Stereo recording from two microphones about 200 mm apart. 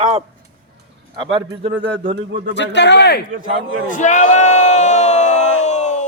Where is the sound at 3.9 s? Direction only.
40° left (ahead or behind).